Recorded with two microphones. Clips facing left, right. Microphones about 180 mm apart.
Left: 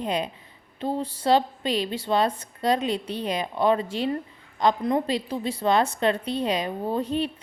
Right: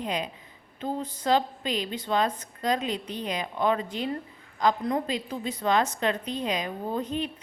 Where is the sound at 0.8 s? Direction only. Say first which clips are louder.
Left 4 dB; 30° left (ahead or behind).